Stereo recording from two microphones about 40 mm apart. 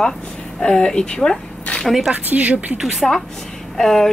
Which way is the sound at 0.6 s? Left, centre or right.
Centre.